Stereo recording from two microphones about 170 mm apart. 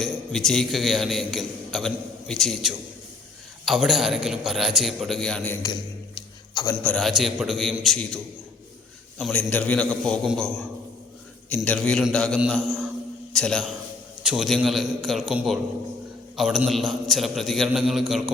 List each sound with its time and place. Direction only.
0.0 s a man's voice: centre (ahead or behind)
5.6 s a sound: 25° left (ahead or behind)
6.8 s a man's voice: centre (ahead or behind)